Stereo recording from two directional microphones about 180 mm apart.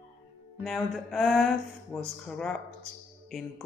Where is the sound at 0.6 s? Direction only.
Centre (ahead or behind).